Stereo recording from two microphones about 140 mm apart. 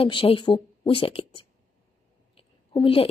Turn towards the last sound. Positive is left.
turn(degrees=40)  # may be behind; listen again after turning